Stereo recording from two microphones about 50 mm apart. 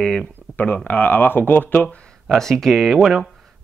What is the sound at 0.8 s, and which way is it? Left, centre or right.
Speech, left.